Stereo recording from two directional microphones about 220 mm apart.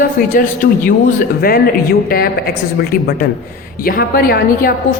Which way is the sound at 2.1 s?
40° left (ahead or behind).